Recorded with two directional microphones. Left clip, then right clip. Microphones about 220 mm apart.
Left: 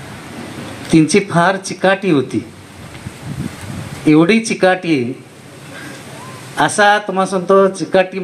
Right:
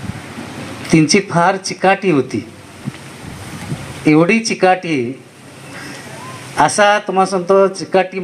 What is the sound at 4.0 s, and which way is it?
Speech, 35° right (ahead or behind).